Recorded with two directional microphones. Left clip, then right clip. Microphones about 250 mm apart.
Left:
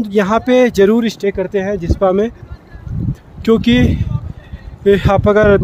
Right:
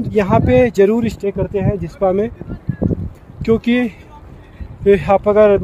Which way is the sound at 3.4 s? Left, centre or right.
Left.